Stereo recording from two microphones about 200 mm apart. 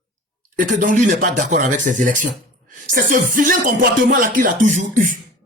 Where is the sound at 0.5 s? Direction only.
40° right (ahead or behind).